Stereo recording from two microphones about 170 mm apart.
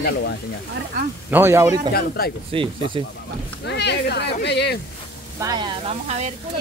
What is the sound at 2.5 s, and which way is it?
Speech, 30° right (ahead or behind).